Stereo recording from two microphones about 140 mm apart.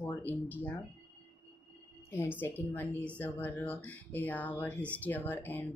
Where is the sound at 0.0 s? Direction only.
15° left (ahead or behind).